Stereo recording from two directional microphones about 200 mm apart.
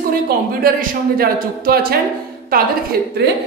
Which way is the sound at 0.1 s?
45° right (ahead or behind).